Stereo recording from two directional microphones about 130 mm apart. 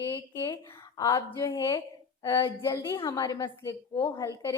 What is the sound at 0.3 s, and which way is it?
A woman's voice, 20° left (ahead or behind).